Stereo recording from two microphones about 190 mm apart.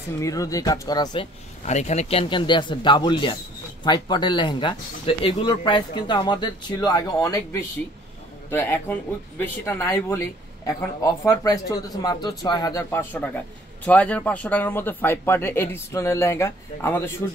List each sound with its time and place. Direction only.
0.2 s speech: 15° left (ahead or behind)
1.6 s speech: 35° left (ahead or behind); by 10.2 s 15° left (ahead or behind)
11.2 s speech: 20° left (ahead or behind)